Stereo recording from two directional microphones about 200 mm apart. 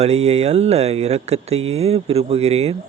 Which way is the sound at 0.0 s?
35° right (ahead or behind).